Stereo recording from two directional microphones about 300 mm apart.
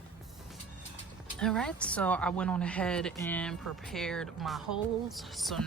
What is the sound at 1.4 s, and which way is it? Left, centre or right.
A woman's voice, centre.